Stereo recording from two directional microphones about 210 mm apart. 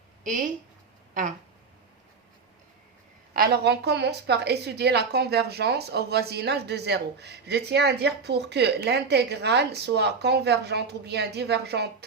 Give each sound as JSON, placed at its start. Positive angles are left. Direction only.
{"t": 0.3, "sound": "speech", "side_deg": -40}
{"t": 3.3, "sound": "a woman's voice", "side_deg": -45}